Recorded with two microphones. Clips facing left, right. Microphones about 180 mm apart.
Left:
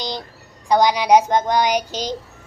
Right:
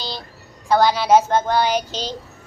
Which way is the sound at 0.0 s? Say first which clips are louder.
Left 3 dB; 15° left (ahead or behind).